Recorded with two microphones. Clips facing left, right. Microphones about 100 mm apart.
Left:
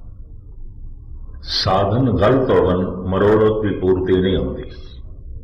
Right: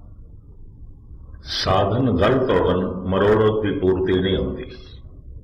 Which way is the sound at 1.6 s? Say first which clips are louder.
Left 2 dB; 15° left (ahead or behind).